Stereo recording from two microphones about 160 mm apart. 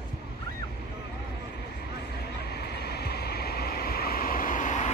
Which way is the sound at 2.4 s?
85° left.